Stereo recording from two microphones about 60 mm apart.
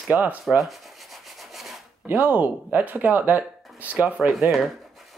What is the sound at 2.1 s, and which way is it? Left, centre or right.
Speech, right.